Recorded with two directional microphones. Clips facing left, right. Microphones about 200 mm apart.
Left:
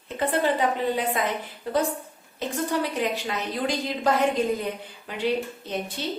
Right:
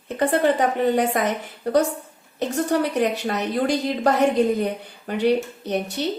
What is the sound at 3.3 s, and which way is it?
A woman's voice, 65° right (ahead or behind).